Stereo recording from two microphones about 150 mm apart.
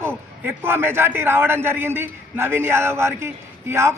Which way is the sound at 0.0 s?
15° right (ahead or behind).